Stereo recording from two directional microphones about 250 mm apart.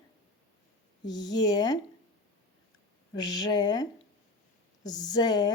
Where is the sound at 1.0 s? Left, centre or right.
Centre.